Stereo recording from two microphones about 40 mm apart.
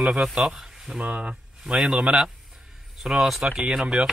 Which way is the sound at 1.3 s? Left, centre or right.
Centre.